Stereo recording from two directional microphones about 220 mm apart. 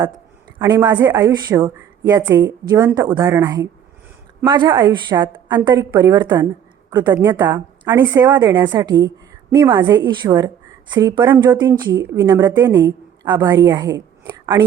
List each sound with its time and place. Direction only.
0.6 s a woman's voice: 15° right (ahead or behind)
10.2 s a woman's voice: 10° right (ahead or behind)